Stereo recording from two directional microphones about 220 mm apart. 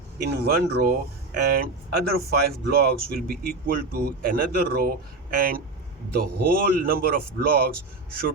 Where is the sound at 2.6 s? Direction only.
45° right (ahead or behind).